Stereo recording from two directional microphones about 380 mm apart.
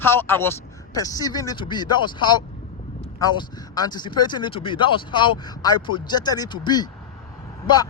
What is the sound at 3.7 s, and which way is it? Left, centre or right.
Speech, centre.